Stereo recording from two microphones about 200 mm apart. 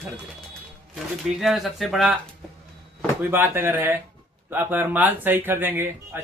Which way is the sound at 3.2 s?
10° right (ahead or behind).